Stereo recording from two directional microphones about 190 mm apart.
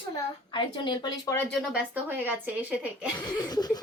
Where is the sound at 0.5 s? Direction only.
25° left (ahead or behind).